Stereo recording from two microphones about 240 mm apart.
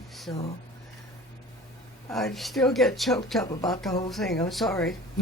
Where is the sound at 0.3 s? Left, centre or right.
Centre.